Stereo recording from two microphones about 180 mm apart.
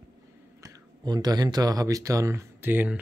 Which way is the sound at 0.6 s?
20° right (ahead or behind).